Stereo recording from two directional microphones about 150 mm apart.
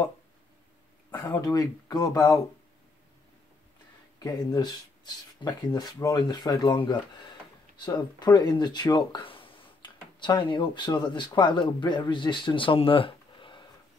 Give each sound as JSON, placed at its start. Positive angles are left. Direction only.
{"t": 1.1, "sound": "speech", "side_deg": 10}
{"t": 1.4, "sound": "speech", "side_deg": 25}
{"t": 4.2, "sound": "speech", "side_deg": 25}